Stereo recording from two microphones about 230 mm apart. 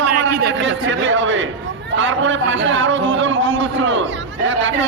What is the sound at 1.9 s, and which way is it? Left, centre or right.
A man's voice, right.